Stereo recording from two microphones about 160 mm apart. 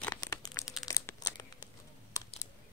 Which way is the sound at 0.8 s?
20° left (ahead or behind).